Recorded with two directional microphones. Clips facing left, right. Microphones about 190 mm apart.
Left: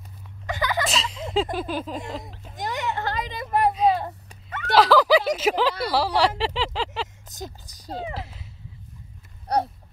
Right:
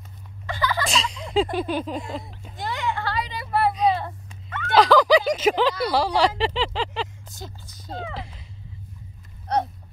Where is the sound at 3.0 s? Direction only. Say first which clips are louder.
Even; 45° left (ahead or behind).